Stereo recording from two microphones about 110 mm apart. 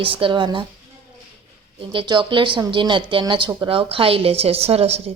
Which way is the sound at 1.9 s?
50° right (ahead or behind).